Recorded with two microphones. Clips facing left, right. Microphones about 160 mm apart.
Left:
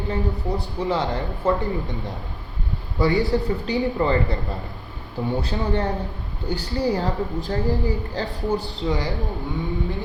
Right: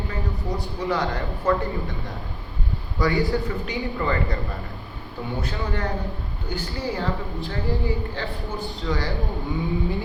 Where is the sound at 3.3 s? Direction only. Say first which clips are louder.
Left 4 dB; 40° left (ahead or behind).